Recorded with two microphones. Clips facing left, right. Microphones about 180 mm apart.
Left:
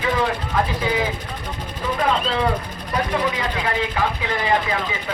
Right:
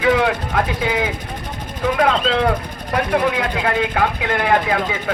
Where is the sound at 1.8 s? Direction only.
85° right.